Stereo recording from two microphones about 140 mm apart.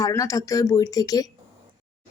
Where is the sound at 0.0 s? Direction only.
20° left (ahead or behind).